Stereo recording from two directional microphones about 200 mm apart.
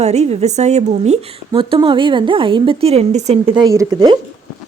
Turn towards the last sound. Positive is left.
turn(degrees=-20)  # may be behind; listen again after turning